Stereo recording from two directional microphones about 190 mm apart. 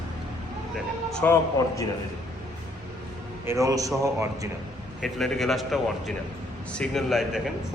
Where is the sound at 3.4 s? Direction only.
15° right (ahead or behind).